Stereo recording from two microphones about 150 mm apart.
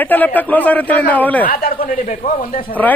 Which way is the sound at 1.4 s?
75° left (ahead or behind).